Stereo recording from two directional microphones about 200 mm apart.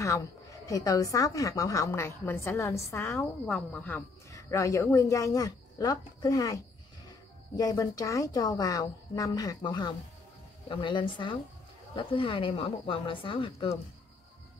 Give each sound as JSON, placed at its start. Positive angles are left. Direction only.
{"t": 0.7, "sound": "a woman's voice", "side_deg": 15}